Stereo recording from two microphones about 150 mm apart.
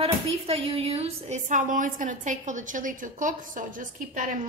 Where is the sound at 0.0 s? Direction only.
40° right (ahead or behind).